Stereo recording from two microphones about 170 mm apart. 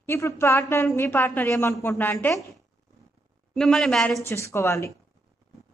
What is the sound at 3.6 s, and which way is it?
Speech, 5° left (ahead or behind).